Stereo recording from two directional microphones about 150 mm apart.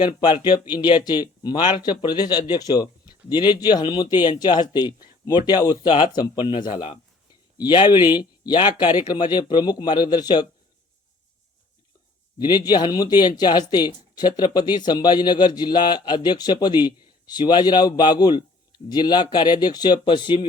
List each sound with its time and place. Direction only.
0.0 s speech: 30° left (ahead or behind)
12.4 s speech: 30° left (ahead or behind)